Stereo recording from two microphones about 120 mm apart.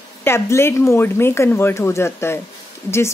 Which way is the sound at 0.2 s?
20° left (ahead or behind).